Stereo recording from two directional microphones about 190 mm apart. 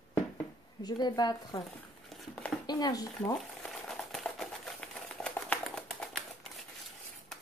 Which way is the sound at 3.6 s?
5° left (ahead or behind).